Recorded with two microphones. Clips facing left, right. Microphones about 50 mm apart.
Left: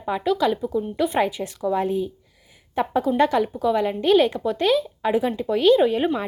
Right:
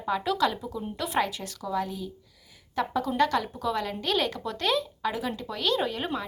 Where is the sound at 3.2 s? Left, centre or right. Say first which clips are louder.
Left 4 dB; centre.